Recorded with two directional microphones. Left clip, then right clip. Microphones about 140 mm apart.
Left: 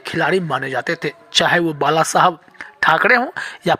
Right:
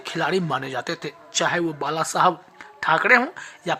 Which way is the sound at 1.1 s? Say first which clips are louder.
Left 8 dB; 45° left (ahead or behind).